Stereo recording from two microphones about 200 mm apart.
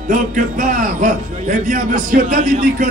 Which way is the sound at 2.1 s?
40° right (ahead or behind).